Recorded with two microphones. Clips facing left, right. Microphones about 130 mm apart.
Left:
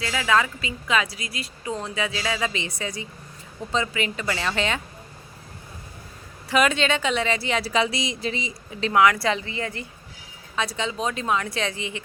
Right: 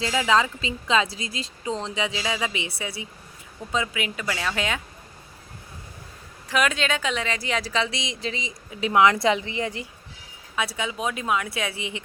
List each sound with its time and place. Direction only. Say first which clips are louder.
0.0 s a woman's voice: right 1 dB; 25° right (ahead or behind); by 4.8 s 5° right (ahead or behind)
6.5 s a woman's voice: left 3 dB; centre (ahead or behind)
8.8 s speech: even; 20° right (ahead or behind)